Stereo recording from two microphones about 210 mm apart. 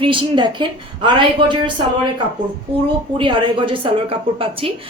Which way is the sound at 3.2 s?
25° right (ahead or behind).